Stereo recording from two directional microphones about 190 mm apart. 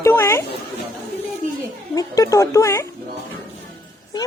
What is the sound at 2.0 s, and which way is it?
Speech, 15° left (ahead or behind).